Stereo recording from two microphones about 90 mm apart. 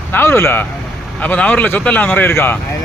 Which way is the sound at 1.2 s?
15° left (ahead or behind).